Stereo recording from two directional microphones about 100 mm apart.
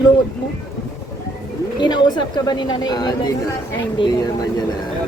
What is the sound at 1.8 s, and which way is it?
A woman's voice, 50° left (ahead or behind).